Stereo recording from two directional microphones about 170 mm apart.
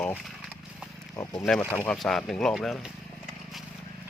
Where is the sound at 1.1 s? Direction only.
20° left (ahead or behind).